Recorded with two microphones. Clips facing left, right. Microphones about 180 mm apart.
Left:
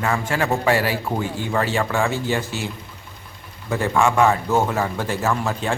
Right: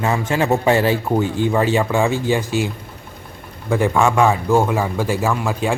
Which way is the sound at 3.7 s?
15° right (ahead or behind).